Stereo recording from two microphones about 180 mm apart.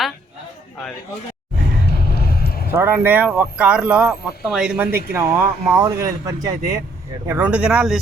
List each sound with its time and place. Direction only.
1.9 s vehicle: 60° left (ahead or behind)
2.7 s speech: 10° right (ahead or behind)
5.1 s speech: 15° right (ahead or behind)